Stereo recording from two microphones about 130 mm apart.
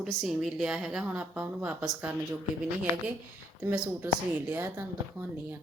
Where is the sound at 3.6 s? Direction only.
15° right (ahead or behind).